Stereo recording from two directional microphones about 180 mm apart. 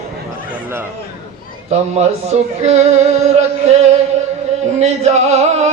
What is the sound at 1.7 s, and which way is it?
Music, 40° right (ahead or behind).